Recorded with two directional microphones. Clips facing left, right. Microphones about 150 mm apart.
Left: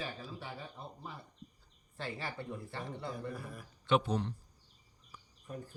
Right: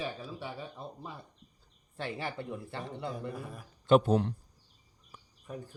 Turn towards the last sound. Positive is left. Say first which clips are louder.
# right 7 dB
turn(degrees=-50)  # may be behind; listen again after turning